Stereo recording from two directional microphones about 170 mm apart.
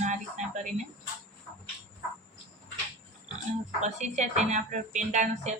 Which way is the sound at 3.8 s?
45° right (ahead or behind).